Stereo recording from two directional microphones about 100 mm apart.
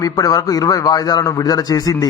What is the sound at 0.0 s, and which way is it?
A man's voice, 40° left (ahead or behind).